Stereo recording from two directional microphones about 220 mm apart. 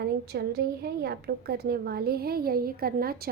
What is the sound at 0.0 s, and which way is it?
A woman's voice, 45° right (ahead or behind).